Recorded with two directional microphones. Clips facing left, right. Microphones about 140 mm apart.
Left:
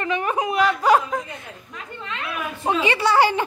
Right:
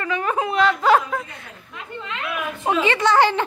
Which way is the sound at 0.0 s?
20° left (ahead or behind).